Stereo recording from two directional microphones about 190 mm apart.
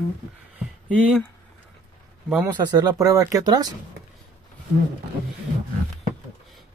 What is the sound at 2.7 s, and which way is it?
Speech, 20° right (ahead or behind).